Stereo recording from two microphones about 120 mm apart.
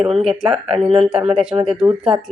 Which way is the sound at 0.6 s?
60° right (ahead or behind).